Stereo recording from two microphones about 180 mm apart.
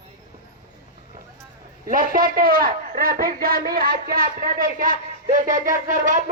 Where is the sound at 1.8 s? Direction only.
50° right (ahead or behind).